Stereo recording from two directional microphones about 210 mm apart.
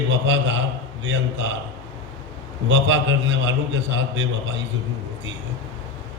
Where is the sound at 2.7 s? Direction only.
60° right (ahead or behind).